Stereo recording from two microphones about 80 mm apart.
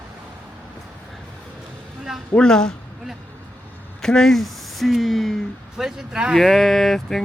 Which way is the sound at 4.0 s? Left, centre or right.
Centre.